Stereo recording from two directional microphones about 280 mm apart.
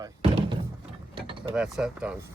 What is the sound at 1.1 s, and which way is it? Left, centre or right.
Mechanisms, centre.